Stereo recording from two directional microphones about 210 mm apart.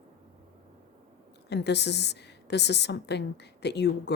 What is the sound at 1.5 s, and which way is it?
A woman's voice, 55° left (ahead or behind).